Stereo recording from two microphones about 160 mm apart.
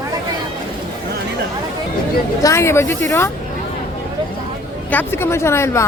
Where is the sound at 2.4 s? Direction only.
20° left (ahead or behind).